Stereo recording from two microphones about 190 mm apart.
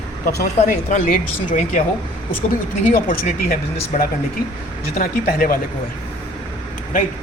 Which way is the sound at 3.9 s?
40° left (ahead or behind).